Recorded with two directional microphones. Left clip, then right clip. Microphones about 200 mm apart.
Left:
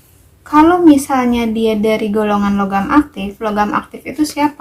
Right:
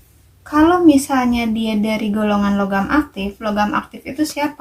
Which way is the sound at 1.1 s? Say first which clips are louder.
Left 3 dB; 25° left (ahead or behind).